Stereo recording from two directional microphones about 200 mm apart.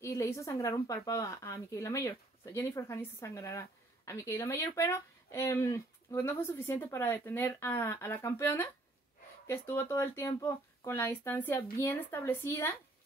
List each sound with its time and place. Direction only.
0.0 s speech: 15° left (ahead or behind)